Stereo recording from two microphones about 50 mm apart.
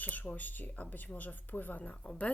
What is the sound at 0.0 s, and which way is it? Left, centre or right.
Speech, left.